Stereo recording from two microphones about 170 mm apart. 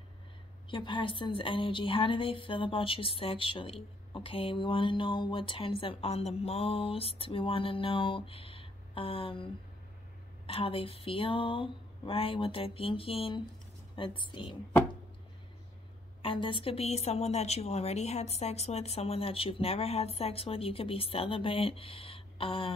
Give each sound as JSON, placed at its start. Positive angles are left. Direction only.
{"t": 0.7, "sound": "a woman's voice", "side_deg": 30}
{"t": 16.2, "sound": "a woman's voice", "side_deg": 30}